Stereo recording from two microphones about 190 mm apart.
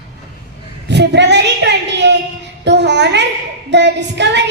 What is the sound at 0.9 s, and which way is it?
A woman's voice, 65° right (ahead or behind).